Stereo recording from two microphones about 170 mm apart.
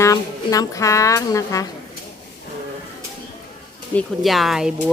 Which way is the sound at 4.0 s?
Centre (ahead or behind).